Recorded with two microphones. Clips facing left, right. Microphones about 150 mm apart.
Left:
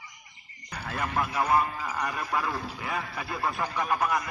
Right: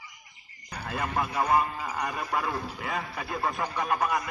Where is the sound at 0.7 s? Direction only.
15° right (ahead or behind).